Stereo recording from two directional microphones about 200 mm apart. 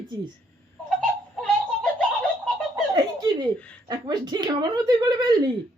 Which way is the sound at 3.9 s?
20° right (ahead or behind).